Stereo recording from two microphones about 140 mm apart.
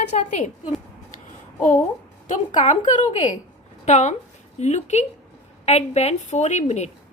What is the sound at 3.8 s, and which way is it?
A woman's voice, 55° left (ahead or behind).